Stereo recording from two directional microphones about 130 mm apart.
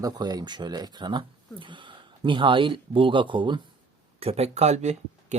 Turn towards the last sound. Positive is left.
turn(degrees=-65)  # may be behind; listen again after turning